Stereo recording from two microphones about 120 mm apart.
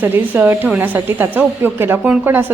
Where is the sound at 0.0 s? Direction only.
15° right (ahead or behind).